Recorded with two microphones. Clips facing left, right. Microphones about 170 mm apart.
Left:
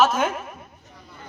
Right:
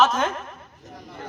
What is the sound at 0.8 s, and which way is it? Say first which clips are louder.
Chatter: right 7 dB; 45° right (ahead or behind).